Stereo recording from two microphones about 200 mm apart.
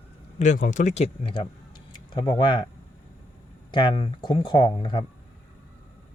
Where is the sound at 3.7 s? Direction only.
25° left (ahead or behind).